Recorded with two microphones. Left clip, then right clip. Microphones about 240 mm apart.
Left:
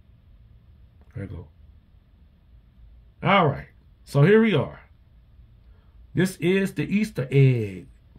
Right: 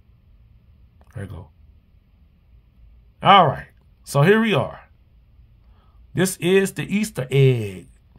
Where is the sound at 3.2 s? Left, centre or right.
Right.